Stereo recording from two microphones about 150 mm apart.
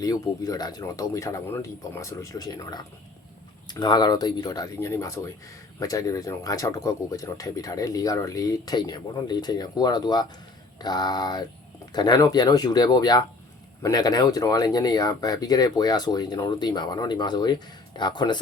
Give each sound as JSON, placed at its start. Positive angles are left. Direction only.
{"t": 0.0, "sound": "speech", "side_deg": 25}